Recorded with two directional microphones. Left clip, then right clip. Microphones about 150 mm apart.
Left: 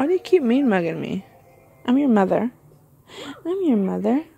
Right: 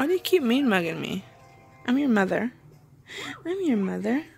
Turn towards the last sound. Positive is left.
turn(degrees=30)  # may be behind; listen again after turning